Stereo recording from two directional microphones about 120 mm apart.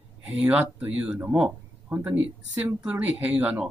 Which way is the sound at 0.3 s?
10° right (ahead or behind).